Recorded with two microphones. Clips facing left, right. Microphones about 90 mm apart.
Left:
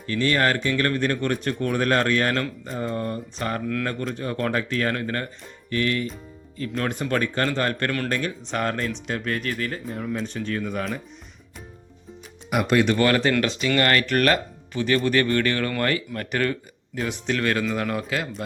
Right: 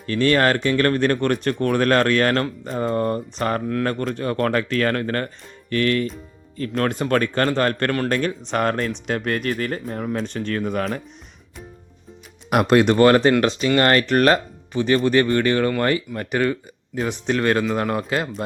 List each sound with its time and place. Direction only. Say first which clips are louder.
0.1 s speech: right 4 dB; 50° right (ahead or behind)
10.2 s speech: right 3 dB; 70° right (ahead or behind)
12.6 s speech: right 6 dB; 45° right (ahead or behind); by 17.0 s 15° right (ahead or behind)
17.0 s speech: right 4 dB; 30° right (ahead or behind)